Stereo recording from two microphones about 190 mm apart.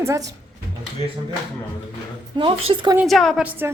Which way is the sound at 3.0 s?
Centre (ahead or behind).